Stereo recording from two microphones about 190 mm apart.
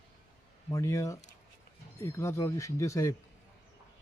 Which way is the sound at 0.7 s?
15° left (ahead or behind).